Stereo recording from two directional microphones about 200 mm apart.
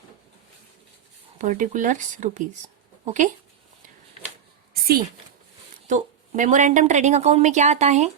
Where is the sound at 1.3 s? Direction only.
40° right (ahead or behind).